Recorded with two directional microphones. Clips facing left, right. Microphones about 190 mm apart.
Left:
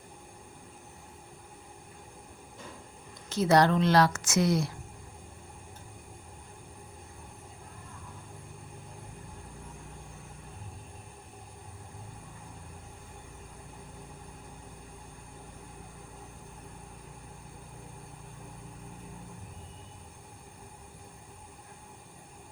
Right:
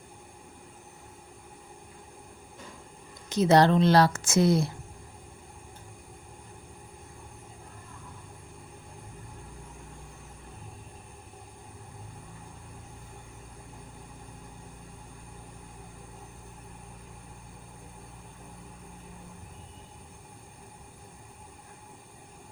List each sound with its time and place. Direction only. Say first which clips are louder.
3.2 s a woman's voice: right 3 dB; 20° right (ahead or behind)